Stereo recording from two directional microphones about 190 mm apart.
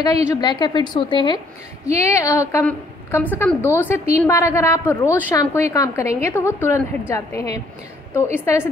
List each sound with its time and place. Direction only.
0.3 s a woman's voice: 20° left (ahead or behind)